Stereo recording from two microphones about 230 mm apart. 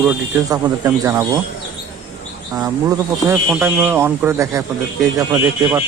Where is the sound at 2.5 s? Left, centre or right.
Centre.